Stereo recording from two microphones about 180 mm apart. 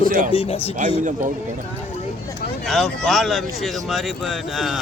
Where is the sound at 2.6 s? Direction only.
Centre (ahead or behind).